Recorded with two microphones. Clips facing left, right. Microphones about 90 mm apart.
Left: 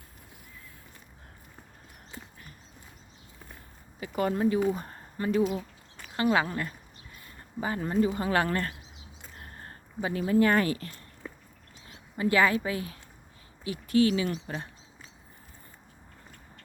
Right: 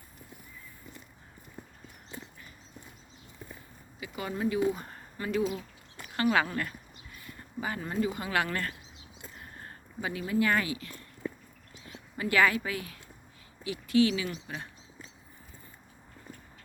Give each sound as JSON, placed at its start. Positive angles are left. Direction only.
{"t": 4.0, "sound": "speech", "side_deg": 40}
{"t": 6.3, "sound": "speech", "side_deg": 20}
{"t": 10.0, "sound": "speech", "side_deg": 35}
{"t": 11.9, "sound": "speech", "side_deg": 25}
{"t": 13.7, "sound": "speech", "side_deg": 40}